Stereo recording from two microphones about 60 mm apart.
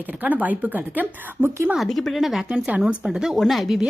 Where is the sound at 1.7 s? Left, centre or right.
Centre.